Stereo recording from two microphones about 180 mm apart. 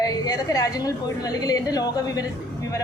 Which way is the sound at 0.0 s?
20° left (ahead or behind).